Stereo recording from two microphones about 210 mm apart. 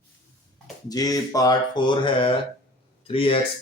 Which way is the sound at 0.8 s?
20° left (ahead or behind).